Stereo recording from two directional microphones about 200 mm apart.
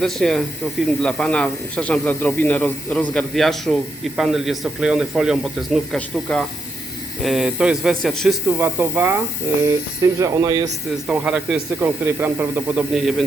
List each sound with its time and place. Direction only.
0.0 s speech: centre (ahead or behind); by 10.7 s 15° right (ahead or behind)
10.9 s speech: 5° right (ahead or behind)